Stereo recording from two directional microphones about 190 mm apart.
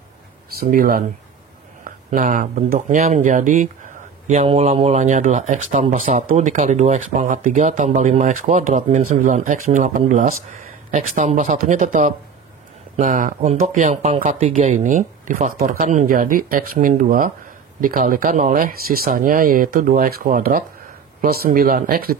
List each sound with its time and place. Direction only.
0.5 s speech: 50° right (ahead or behind)